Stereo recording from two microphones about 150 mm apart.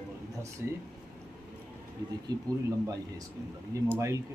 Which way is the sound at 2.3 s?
25° right (ahead or behind).